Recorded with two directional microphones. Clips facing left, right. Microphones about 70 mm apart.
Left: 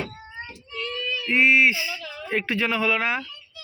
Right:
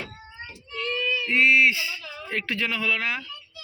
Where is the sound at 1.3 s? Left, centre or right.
Left.